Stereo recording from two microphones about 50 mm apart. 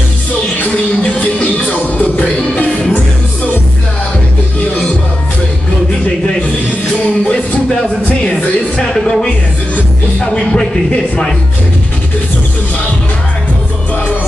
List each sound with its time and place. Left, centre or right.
1.4 s music: left
8.3 s music: left
8.9 s music: centre
10.3 s a sound: centre